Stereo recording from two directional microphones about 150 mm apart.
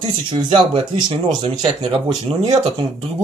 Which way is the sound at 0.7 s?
30° right (ahead or behind).